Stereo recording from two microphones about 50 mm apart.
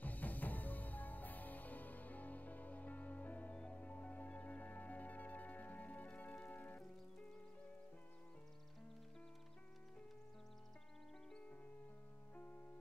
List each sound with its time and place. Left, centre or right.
0.0 s music: left